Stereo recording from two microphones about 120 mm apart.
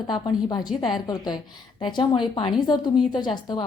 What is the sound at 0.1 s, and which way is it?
A woman's voice, 35° left (ahead or behind).